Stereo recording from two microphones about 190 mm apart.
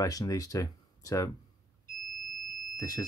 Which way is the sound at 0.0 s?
20° left (ahead or behind).